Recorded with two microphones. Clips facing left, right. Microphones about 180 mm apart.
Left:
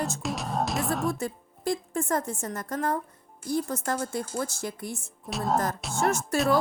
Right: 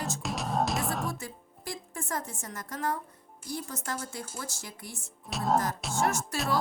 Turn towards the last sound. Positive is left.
turn(degrees=50)  # may be behind; listen again after turning